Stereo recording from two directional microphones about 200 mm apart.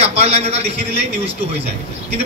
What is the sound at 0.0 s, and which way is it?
A man's voice, 30° right (ahead or behind).